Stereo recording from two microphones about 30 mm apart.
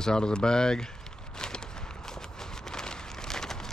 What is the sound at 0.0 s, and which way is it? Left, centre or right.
Speech, left.